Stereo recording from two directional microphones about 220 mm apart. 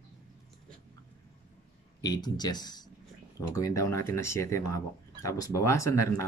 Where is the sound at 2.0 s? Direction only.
20° left (ahead or behind).